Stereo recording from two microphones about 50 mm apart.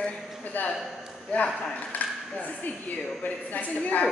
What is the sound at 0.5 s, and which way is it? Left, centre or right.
Speech, left.